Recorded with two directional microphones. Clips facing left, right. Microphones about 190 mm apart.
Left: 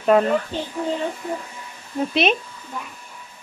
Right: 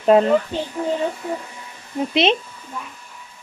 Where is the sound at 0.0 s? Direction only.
25° right (ahead or behind).